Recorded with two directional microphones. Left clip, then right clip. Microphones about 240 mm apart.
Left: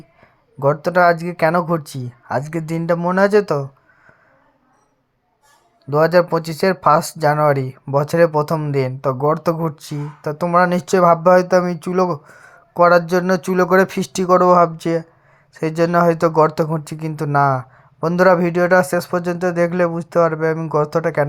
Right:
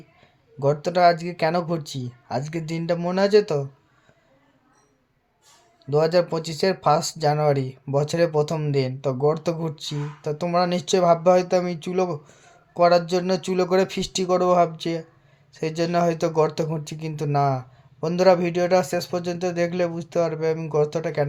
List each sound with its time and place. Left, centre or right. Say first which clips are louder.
0.6 s speech: left 4 dB; centre
5.8 s speech: left 6 dB; centre